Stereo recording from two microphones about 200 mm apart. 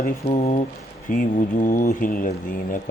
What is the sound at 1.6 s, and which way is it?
Speech, 40° left (ahead or behind).